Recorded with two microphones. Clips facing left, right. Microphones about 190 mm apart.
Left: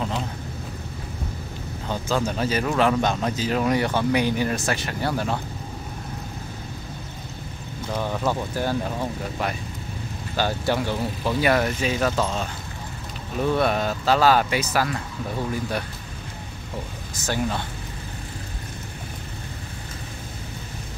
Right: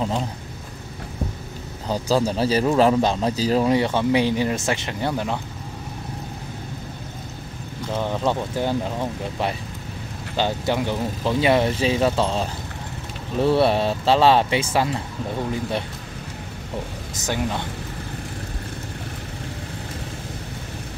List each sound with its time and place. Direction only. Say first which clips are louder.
1.9 s a man's voice: right 4 dB; 35° right (ahead or behind); by 5.4 s 20° right (ahead or behind)
8.0 s a man's voice: right 2 dB; 20° right (ahead or behind)
10.3 s a man's voice: right 1 dB; 20° right (ahead or behind)
17.2 s speech: even; 15° right (ahead or behind)